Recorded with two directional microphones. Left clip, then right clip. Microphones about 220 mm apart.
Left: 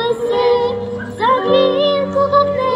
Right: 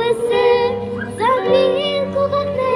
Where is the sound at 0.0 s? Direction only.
25° right (ahead or behind).